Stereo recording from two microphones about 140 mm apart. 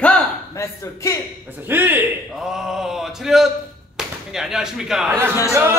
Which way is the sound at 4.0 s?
5° right (ahead or behind).